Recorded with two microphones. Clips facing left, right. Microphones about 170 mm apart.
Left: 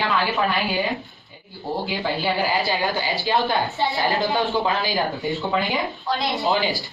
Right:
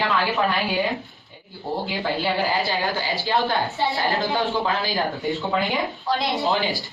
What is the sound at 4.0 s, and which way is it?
Speech, 20° left (ahead or behind).